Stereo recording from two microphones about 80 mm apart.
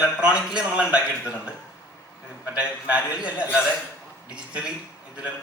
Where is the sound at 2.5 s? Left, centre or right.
Centre.